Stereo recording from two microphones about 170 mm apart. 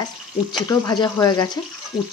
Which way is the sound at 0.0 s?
25° left (ahead or behind).